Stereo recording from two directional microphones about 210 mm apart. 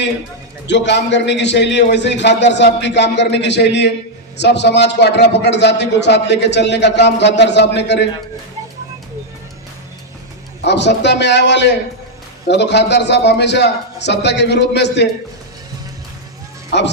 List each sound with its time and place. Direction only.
0.7 s a man's voice: 55° left (ahead or behind)
10.6 s a man's voice: 55° left (ahead or behind)
16.7 s a man's voice: 55° left (ahead or behind)